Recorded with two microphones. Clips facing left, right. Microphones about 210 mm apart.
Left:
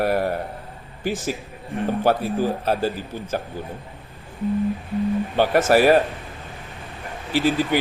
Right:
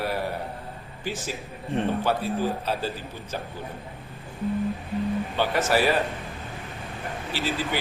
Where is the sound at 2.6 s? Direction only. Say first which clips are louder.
Left 6 dB; 50° left (ahead or behind).